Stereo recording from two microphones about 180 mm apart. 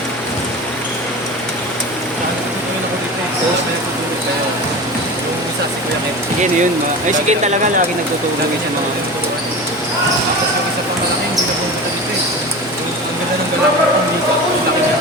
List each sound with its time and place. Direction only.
7.1 s speech: 40° right (ahead or behind)